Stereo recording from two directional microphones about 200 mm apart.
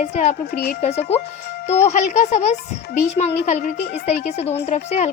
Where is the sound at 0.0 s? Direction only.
35° left (ahead or behind).